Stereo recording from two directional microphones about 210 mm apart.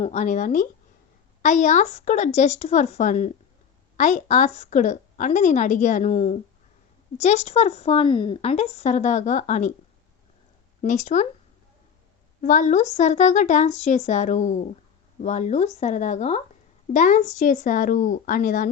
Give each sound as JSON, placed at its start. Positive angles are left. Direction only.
{"t": 0.0, "sound": "a woman's voice", "side_deg": 35}
{"t": 10.8, "sound": "speech", "side_deg": 35}
{"t": 12.4, "sound": "a woman's voice", "side_deg": 40}